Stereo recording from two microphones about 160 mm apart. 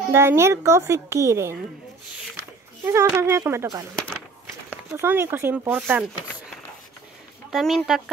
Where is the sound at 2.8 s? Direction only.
15° right (ahead or behind).